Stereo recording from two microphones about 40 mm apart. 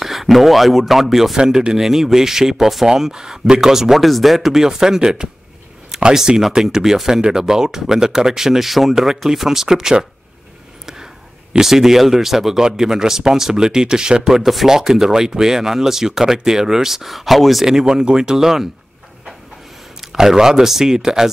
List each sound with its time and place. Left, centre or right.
0.0 s speech: centre
1.3 s speech: centre
11.5 s speech: centre
17.8 s speech: right
20.0 s speech: centre